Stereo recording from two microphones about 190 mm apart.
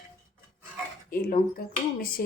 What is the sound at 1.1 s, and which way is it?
Speech, 50° left (ahead or behind).